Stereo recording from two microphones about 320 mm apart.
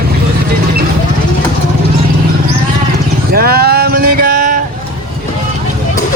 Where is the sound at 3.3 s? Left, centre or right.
Right.